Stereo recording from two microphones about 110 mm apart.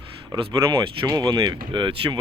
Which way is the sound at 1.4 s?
45° right (ahead or behind).